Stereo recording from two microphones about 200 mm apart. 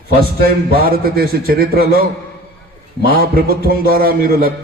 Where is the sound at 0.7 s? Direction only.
50° right (ahead or behind).